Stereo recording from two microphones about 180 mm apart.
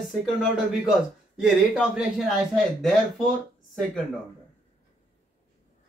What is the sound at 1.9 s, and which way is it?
Speech, centre (ahead or behind).